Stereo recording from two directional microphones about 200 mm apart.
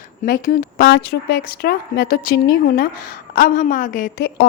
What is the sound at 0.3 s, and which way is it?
A woman's voice, 45° left (ahead or behind).